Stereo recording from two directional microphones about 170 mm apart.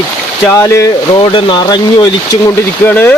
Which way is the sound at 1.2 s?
30° left (ahead or behind).